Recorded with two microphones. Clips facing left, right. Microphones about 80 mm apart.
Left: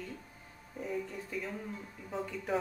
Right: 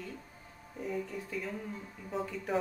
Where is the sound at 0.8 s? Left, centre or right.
Centre.